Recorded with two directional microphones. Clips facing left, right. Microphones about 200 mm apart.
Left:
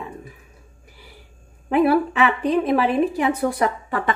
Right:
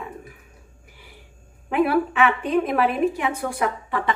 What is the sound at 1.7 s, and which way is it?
A woman's voice, 35° left (ahead or behind).